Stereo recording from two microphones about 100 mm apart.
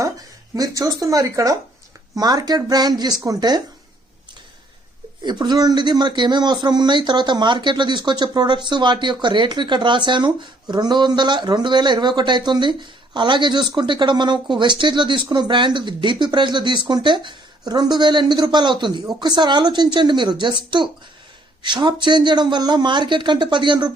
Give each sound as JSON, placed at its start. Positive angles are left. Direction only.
{"t": 0.5, "sound": "speech", "side_deg": -35}
{"t": 5.2, "sound": "speech", "side_deg": -45}